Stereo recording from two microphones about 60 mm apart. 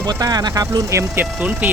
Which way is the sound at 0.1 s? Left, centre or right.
Right.